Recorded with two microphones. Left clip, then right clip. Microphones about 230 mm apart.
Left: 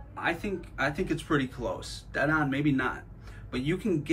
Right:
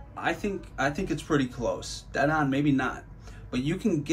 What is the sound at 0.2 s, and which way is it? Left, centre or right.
Speech, centre.